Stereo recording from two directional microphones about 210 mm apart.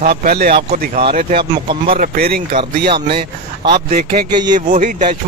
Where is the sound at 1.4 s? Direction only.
25° right (ahead or behind).